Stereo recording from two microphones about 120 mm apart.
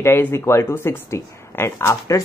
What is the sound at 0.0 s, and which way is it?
Speech, 20° left (ahead or behind).